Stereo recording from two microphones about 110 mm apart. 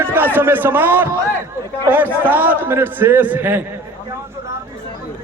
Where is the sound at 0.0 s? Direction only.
20° right (ahead or behind).